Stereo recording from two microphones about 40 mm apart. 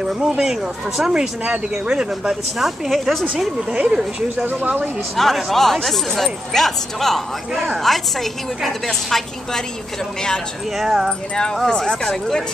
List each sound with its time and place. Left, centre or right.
0.0 s speech: centre
1.4 s speech: right
2.6 s speech: centre
3.8 s speech: centre
4.5 s speech: right
5.1 s speech: centre
10.8 s speech: centre
11.1 s speech: centre